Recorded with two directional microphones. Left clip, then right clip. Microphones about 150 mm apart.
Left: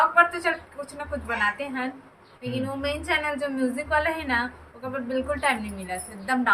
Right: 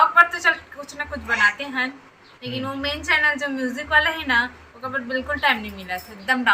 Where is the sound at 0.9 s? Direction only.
10° left (ahead or behind).